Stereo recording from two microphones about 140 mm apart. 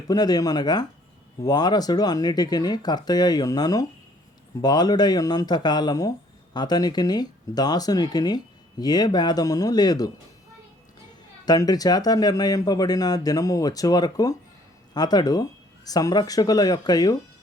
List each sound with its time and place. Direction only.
0.1 s speech: 30° left (ahead or behind)
11.4 s speech: 30° left (ahead or behind)